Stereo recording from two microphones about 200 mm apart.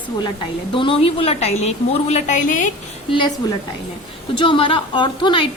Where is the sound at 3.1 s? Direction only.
25° left (ahead or behind).